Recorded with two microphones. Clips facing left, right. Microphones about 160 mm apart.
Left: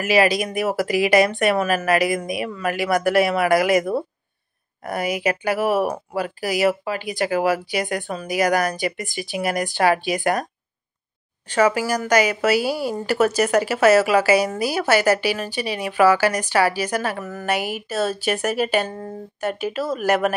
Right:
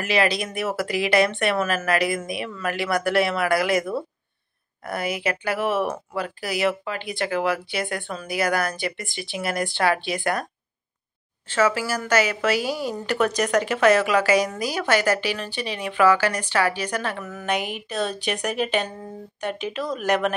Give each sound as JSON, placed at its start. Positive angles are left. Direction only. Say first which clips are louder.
{"t": 0.0, "sound": "a woman's voice", "louder": "left 4 dB", "side_deg": 10}
{"t": 4.9, "sound": "a woman's voice", "louder": "left 4 dB", "side_deg": 15}
{"t": 5.6, "sound": "speech", "louder": "left 3 dB", "side_deg": 40}
{"t": 5.9, "sound": "a woman's voice", "louder": "left 3 dB", "side_deg": 10}
{"t": 7.2, "sound": "speech", "louder": "left 4 dB", "side_deg": 40}
{"t": 7.7, "sound": "a woman's voice", "louder": "left 4 dB", "side_deg": 15}
{"t": 11.4, "sound": "a woman's voice", "louder": "left 3 dB", "side_deg": 15}